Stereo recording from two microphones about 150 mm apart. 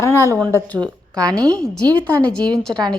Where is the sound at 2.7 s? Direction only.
30° right (ahead or behind).